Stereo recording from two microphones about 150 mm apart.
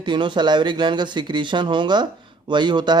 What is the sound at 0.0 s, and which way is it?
Speech, 30° right (ahead or behind).